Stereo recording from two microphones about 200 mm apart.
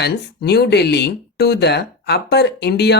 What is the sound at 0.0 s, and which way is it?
Speech, 55° left (ahead or behind).